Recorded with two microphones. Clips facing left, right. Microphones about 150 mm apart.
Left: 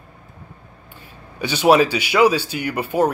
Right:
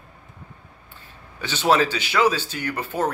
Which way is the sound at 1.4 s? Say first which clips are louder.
Left 5 dB; 15° left (ahead or behind).